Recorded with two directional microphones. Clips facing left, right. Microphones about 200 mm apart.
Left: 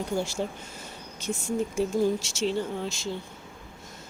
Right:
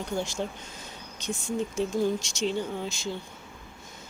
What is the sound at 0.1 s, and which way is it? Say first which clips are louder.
Speech: right 1 dB; 10° left (ahead or behind).